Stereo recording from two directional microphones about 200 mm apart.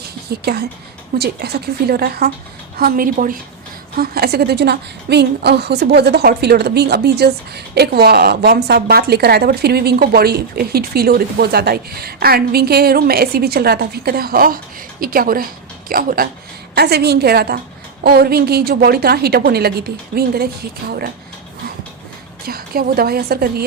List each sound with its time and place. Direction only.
0.3 s a woman's voice: 50° right (ahead or behind)
22.4 s a woman's voice: 50° right (ahead or behind)